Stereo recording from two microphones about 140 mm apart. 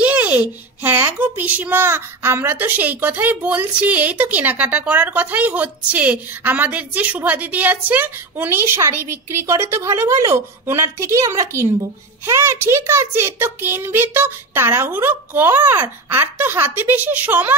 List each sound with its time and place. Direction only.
0.0 s a child's voice: 10° right (ahead or behind)